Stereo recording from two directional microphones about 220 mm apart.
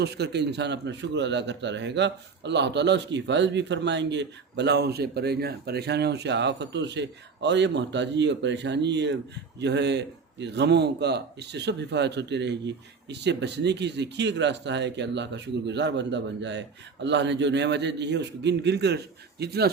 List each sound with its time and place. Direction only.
0.0 s a man's voice: 50° right (ahead or behind)